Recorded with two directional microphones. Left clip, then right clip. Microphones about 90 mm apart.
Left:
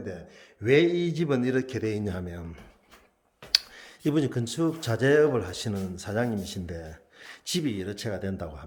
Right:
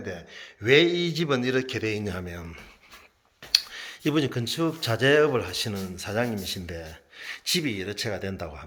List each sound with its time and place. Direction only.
0.0 s speech: 10° left (ahead or behind)
0.6 s speech: 25° left (ahead or behind)
3.5 s speech: 20° left (ahead or behind)
5.5 s speech: 50° left (ahead or behind)
5.8 s speech: 35° left (ahead or behind)